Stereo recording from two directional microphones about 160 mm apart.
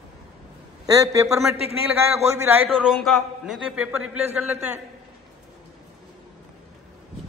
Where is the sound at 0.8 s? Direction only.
20° right (ahead or behind).